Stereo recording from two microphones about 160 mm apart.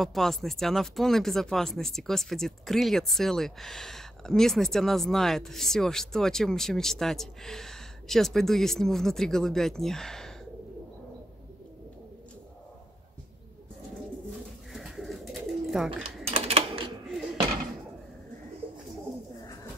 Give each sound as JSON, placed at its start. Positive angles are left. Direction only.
{"t": 0.0, "sound": "speech", "side_deg": 0}
{"t": 14.7, "sound": "bird", "side_deg": 0}
{"t": 16.3, "sound": "typing", "side_deg": -40}